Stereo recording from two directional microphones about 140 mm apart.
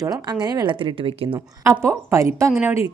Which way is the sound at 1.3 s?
20° right (ahead or behind).